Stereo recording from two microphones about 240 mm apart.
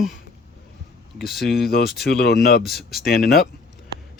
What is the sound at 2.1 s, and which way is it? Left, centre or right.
Speech, left.